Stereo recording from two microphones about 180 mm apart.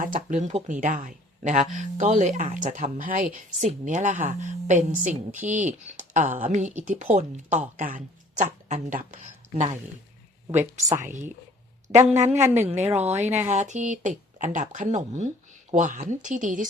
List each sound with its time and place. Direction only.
0.0 s a woman's voice: 45° right (ahead or behind)
10.5 s speech: 10° right (ahead or behind)
12.0 s a woman's voice: 40° right (ahead or behind)